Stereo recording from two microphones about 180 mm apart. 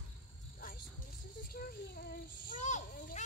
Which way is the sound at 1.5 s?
55° left (ahead or behind).